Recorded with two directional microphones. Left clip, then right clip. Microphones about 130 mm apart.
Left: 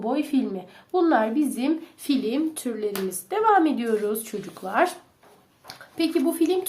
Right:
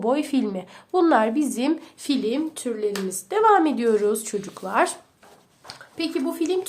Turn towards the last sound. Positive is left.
turn(degrees=-5)  # may be behind; listen again after turning